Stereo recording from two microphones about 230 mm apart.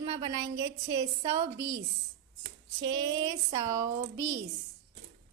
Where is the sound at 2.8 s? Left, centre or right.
Centre.